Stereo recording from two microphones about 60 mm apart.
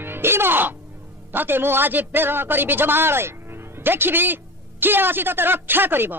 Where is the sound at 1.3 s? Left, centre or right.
Right.